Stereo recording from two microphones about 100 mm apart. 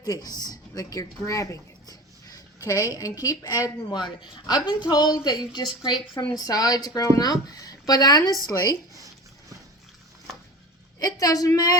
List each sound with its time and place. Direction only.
0.0 s speech: 35° left (ahead or behind)
4.2 s speech: 45° left (ahead or behind)
11.0 s speech: 40° left (ahead or behind)